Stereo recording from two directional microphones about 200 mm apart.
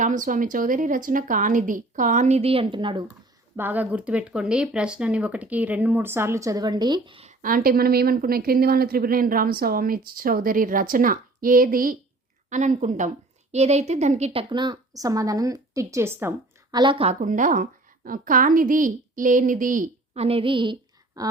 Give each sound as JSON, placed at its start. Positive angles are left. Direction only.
{"t": 0.0, "sound": "a woman's voice", "side_deg": -40}
{"t": 3.5, "sound": "speech", "side_deg": -10}
{"t": 7.4, "sound": "a woman's voice", "side_deg": -45}
{"t": 16.7, "sound": "a woman's voice", "side_deg": -25}
{"t": 20.2, "sound": "a woman's voice", "side_deg": -25}
{"t": 21.2, "sound": "a sound", "side_deg": -20}